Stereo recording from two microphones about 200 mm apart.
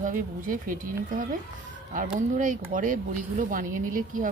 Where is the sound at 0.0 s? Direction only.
40° right (ahead or behind).